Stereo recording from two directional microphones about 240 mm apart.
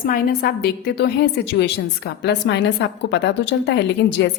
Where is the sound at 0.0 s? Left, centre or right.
Left.